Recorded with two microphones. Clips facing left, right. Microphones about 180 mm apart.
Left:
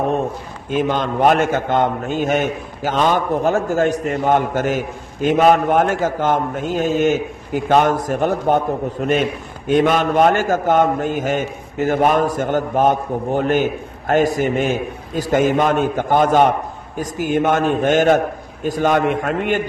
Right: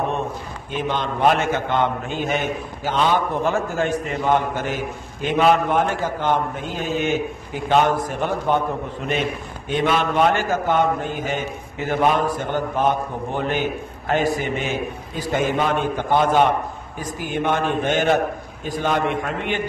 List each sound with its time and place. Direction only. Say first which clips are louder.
0.7 s a man's voice: left 5 dB; 45° left (ahead or behind)